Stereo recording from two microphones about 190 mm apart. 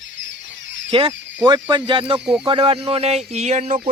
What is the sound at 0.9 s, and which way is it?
Speech, 30° right (ahead or behind).